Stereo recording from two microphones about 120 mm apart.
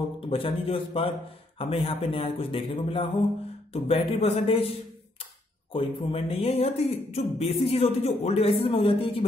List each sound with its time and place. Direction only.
0.3 s speech: 50° left (ahead or behind)